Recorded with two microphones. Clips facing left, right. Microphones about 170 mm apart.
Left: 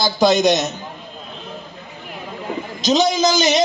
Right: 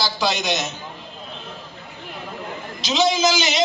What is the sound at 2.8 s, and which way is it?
Speech, 45° left (ahead or behind).